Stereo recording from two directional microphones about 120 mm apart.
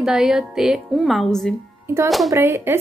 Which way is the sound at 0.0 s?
5° right (ahead or behind).